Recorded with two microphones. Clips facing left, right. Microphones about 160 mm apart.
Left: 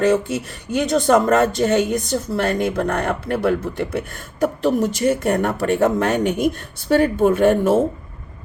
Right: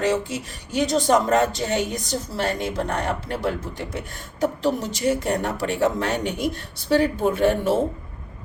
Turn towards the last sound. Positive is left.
turn(degrees=50)  # may be behind; listen again after turning